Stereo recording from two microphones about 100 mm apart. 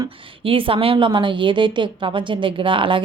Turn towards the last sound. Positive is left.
turn(degrees=-60)  # may be behind; listen again after turning